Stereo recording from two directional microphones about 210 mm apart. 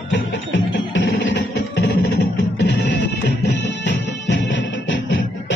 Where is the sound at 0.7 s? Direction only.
60° left (ahead or behind).